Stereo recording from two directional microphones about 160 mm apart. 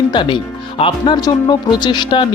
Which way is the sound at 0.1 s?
30° left (ahead or behind).